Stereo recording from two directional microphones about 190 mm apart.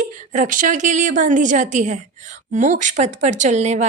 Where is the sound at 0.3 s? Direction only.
45° right (ahead or behind).